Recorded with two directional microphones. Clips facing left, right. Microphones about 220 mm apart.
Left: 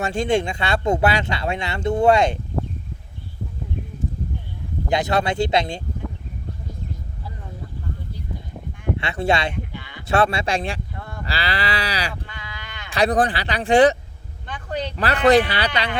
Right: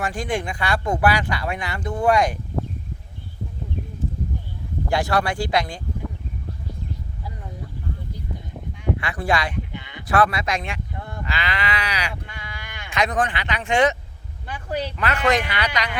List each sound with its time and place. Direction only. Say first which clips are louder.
0.0 s speech: left 5 dB; 25° left (ahead or behind)
4.9 s speech: left 1 dB; 20° left (ahead or behind)
9.0 s speech: left 4 dB; 25° left (ahead or behind)
9.7 s a sound: right 1 dB; 20° right (ahead or behind)
10.1 s speech: left 1 dB; 25° left (ahead or behind)
10.9 s cattle: right 1 dB; 20° right (ahead or behind)
11.3 s speech: left 2 dB; 35° left (ahead or behind)
12.3 s sheep: even; 10° right (ahead or behind)
12.9 s speech: left 4 dB; 35° left (ahead or behind)
14.4 s a sound: even; 10° right (ahead or behind)
14.9 s speech: left 7 dB; 35° left (ahead or behind)